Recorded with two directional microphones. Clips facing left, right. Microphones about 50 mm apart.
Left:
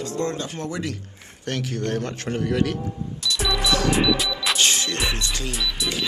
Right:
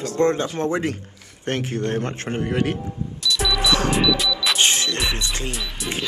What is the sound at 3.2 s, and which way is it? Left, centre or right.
Music, centre.